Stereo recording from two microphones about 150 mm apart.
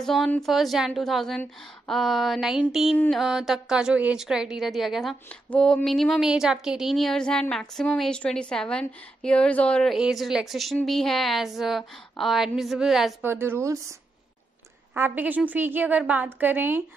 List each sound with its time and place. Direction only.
0.0 s a woman's voice: 5° left (ahead or behind)
13.2 s a woman's voice: 15° right (ahead or behind)
15.0 s a woman's voice: 10° right (ahead or behind)